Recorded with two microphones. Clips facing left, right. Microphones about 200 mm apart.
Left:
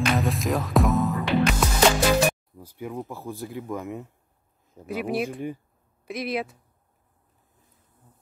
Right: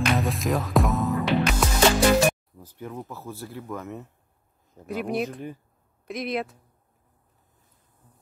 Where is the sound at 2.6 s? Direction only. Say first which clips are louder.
Left 3 dB; 10° left (ahead or behind).